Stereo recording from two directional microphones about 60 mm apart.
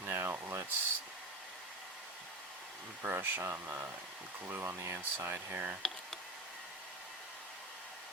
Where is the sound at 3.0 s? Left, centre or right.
Right.